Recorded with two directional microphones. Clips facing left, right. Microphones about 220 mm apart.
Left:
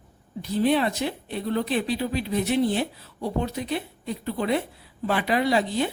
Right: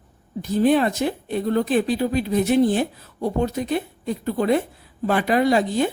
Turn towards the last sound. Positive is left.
turn(degrees=-45)  # may be behind; listen again after turning